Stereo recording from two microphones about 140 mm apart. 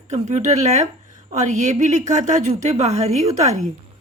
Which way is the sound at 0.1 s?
55° right (ahead or behind).